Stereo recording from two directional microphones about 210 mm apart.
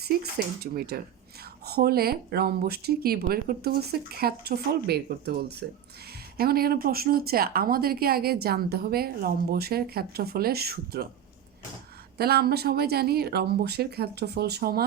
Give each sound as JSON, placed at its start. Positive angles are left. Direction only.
{"t": 0.0, "sound": "speech", "side_deg": -50}
{"t": 12.1, "sound": "speech", "side_deg": -50}